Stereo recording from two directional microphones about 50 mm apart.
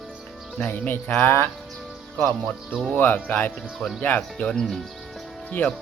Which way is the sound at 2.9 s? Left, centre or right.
Left.